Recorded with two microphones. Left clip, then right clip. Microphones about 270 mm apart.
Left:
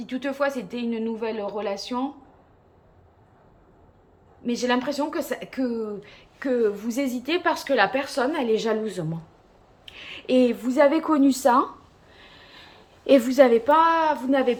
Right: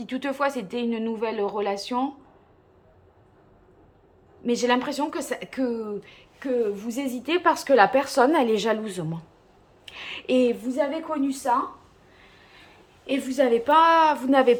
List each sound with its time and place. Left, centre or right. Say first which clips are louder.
0.0 s a woman's voice: even; centre
4.4 s a woman's voice: right 1 dB; centre
9.8 s a sound: right 1 dB; centre
10.7 s a woman's voice: left 7 dB; centre
11.1 s speech: left 5 dB; left
12.1 s a sound: left 5 dB; left
13.1 s a woman's voice: left 6 dB; centre